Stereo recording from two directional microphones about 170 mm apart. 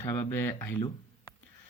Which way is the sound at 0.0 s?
15° left (ahead or behind).